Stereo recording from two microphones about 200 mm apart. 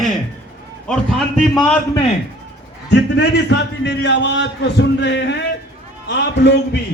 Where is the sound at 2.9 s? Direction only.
60° left (ahead or behind).